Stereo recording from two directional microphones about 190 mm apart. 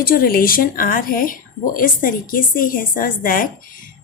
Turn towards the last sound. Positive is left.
turn(degrees=45)  # may be behind; listen again after turning